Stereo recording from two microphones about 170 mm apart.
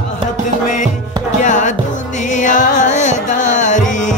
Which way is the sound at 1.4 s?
45° left (ahead or behind).